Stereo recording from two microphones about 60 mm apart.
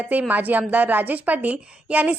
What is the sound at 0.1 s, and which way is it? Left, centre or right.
A woman's voice, right.